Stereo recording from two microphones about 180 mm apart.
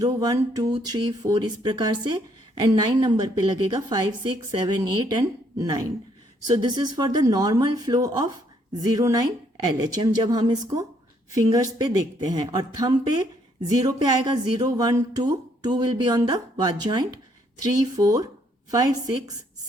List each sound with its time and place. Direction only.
0.0 s a woman's voice: 20° right (ahead or behind)